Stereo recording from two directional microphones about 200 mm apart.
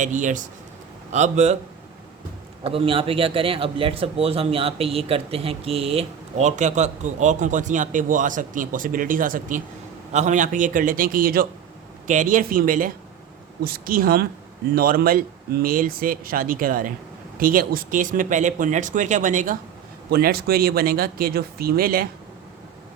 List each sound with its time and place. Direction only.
0.0 s speech: 40° right (ahead or behind)
2.6 s speech: 25° right (ahead or behind)
20.1 s speech: 50° right (ahead or behind)